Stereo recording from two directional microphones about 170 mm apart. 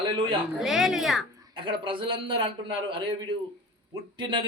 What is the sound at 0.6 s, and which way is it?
Speech, centre (ahead or behind).